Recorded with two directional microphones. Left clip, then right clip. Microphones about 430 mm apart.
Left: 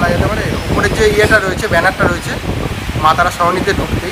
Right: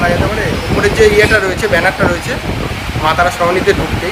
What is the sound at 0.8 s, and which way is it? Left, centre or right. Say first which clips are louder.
Speech: right 3 dB; centre.